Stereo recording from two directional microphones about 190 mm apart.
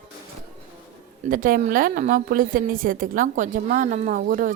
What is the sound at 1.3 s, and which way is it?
A woman's voice, 45° right (ahead or behind).